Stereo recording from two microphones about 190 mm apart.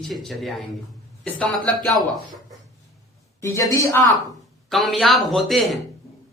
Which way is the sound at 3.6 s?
15° left (ahead or behind).